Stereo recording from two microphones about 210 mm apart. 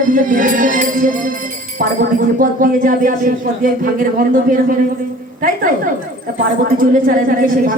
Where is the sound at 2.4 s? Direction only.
40° right (ahead or behind).